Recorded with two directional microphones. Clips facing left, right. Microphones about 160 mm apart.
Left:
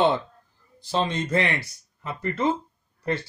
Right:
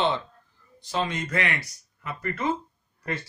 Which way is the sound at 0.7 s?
30° left (ahead or behind).